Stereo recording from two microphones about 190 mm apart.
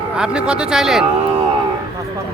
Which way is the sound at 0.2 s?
5° right (ahead or behind).